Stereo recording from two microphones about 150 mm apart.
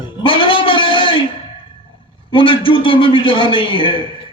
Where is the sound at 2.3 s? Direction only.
35° left (ahead or behind).